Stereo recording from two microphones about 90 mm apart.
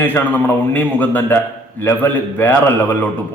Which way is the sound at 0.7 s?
20° left (ahead or behind).